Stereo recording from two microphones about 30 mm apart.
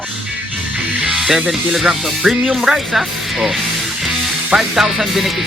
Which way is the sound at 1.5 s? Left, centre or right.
Centre.